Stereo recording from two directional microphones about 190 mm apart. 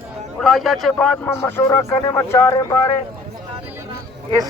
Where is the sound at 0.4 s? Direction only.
Centre (ahead or behind); by 2.8 s 20° left (ahead or behind).